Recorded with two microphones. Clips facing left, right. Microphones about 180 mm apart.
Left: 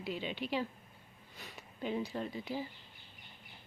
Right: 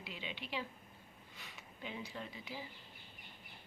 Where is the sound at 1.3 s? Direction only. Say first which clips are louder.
Left 8 dB; 40° left (ahead or behind).